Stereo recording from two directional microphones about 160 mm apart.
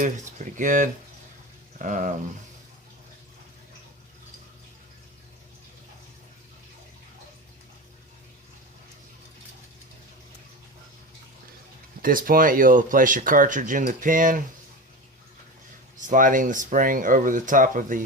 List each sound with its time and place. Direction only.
0.0 s speech: 50° right (ahead or behind)
12.0 s speech: 60° right (ahead or behind)
16.0 s speech: 55° right (ahead or behind)